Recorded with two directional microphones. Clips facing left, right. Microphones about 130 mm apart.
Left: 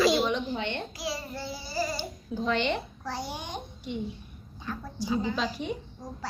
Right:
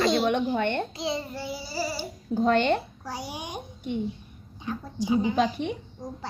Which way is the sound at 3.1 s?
15° right (ahead or behind).